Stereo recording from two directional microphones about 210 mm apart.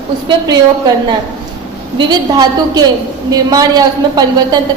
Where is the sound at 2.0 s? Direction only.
20° right (ahead or behind).